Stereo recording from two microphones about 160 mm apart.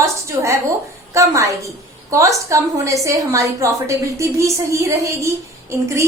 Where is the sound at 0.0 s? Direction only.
20° right (ahead or behind).